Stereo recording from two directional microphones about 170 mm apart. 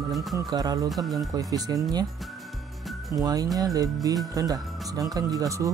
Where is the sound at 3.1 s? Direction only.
20° right (ahead or behind).